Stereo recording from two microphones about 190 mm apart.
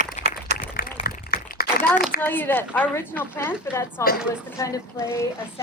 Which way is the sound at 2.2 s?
10° left (ahead or behind).